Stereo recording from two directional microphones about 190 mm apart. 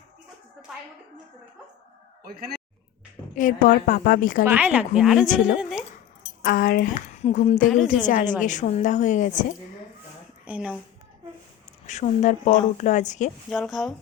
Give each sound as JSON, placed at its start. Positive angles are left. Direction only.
{"t": 3.3, "sound": "a woman's voice", "side_deg": 45}
{"t": 4.4, "sound": "speech", "side_deg": -5}
{"t": 6.4, "sound": "a woman's voice", "side_deg": 50}
{"t": 7.2, "sound": "a woman's voice", "side_deg": 35}
{"t": 7.7, "sound": "speech", "side_deg": 0}
{"t": 8.0, "sound": "a woman's voice", "side_deg": 40}
{"t": 10.4, "sound": "a woman's voice", "side_deg": -5}
{"t": 11.9, "sound": "a woman's voice", "side_deg": 40}
{"t": 13.5, "sound": "speech", "side_deg": 0}